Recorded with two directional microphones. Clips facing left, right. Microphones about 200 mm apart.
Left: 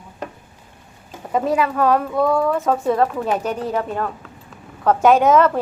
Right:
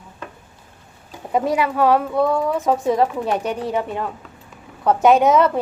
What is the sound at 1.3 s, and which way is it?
Speech, 10° right (ahead or behind).